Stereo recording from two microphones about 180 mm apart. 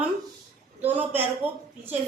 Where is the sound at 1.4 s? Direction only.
35° right (ahead or behind).